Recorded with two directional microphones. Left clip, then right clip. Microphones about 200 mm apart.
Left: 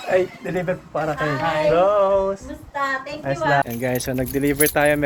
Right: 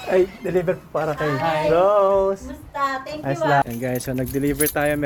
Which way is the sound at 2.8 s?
30° right (ahead or behind).